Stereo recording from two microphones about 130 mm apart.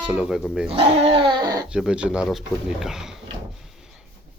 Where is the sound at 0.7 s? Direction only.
50° right (ahead or behind).